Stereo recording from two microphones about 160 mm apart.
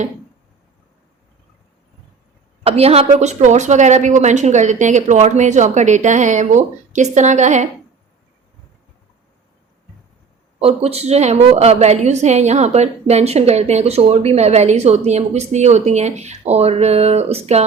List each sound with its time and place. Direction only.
2.6 s a woman's voice: 40° right (ahead or behind)
10.6 s a woman's voice: 40° right (ahead or behind)